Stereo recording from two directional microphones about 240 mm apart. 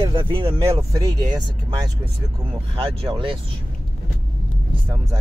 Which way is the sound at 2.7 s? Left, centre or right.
Right.